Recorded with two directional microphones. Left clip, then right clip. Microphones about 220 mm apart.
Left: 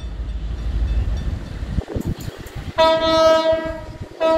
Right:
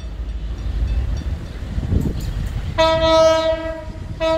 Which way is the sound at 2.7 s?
20° right (ahead or behind).